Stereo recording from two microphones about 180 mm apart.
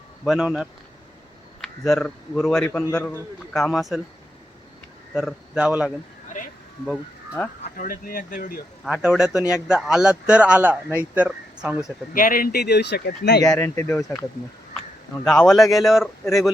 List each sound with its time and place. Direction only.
0.3 s a man's voice: 5° right (ahead or behind); by 3.2 s 10° left (ahead or behind)
3.5 s a man's voice: centre (ahead or behind)
5.1 s a man's voice: 5° right (ahead or behind)
6.9 s speech: 5° left (ahead or behind)
7.8 s speech: 50° left (ahead or behind)
8.8 s a man's voice: 5° right (ahead or behind)
12.1 s speech: 50° left (ahead or behind)
13.4 s a man's voice: 15° left (ahead or behind); by 16.0 s centre (ahead or behind)